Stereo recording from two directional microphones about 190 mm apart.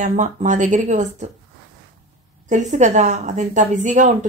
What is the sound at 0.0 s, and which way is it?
A woman's voice, 40° right (ahead or behind).